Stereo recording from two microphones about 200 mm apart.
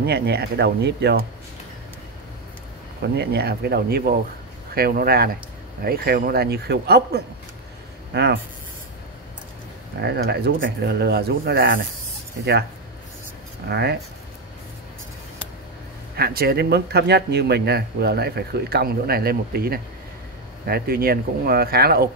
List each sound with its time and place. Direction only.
0.0 s speech: 55° right (ahead or behind)
3.0 s speech: 55° right (ahead or behind)
10.0 s speech: 55° right (ahead or behind)
13.7 s speech: 55° right (ahead or behind)
16.2 s speech: 50° right (ahead or behind)